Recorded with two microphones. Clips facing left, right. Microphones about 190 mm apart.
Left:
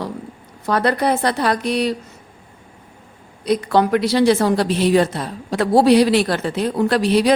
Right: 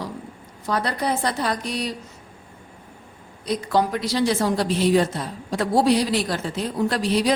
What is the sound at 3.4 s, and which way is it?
A woman's voice, 65° left (ahead or behind).